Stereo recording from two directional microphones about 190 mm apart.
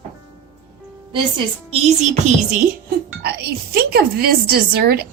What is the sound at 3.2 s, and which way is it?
A woman's voice, 60° right (ahead or behind).